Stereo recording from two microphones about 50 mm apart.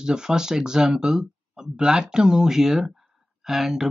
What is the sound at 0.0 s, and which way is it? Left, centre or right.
Speech, centre.